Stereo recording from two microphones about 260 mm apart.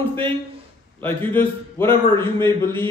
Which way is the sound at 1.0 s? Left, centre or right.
Centre.